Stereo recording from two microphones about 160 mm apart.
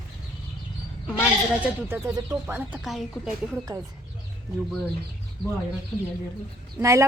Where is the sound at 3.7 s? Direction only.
25° right (ahead or behind).